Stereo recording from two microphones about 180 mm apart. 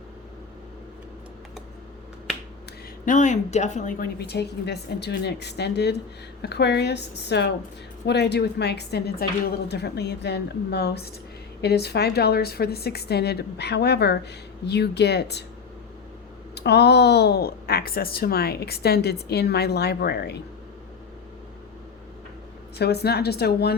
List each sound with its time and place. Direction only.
3.1 s a woman's voice: 45° left (ahead or behind); by 15.4 s 70° left (ahead or behind)
16.6 s a woman's voice: 65° left (ahead or behind)
22.8 s a woman's voice: 65° left (ahead or behind)